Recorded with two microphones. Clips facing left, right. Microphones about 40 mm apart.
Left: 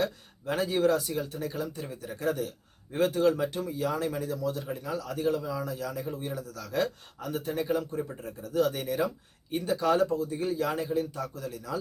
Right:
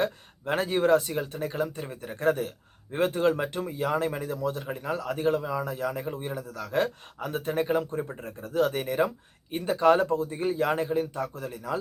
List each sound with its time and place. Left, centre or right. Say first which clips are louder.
0.0 s speech: right 2 dB; right
9.5 s speech: right 1 dB; right
9.7 s speech: right 4 dB; right